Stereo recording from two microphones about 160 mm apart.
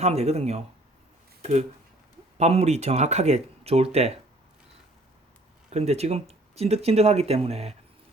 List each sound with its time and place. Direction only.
0.0 s speech: 40° right (ahead or behind)
5.7 s speech: 40° right (ahead or behind)